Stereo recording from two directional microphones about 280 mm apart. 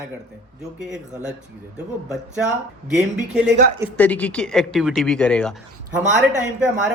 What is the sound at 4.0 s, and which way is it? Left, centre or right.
Speech, centre.